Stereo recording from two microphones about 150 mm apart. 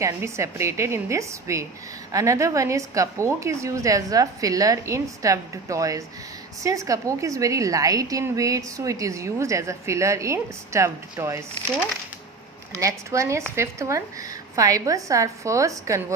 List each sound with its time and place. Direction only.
0.0 s a woman's voice: 20° right (ahead or behind)
12.7 s a woman's voice: 20° right (ahead or behind)